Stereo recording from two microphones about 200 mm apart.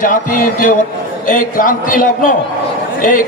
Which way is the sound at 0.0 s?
45° left (ahead or behind).